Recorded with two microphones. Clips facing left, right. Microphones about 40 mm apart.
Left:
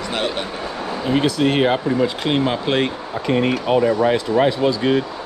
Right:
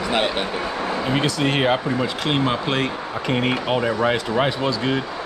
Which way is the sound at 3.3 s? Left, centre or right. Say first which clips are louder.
Left 4 dB; right.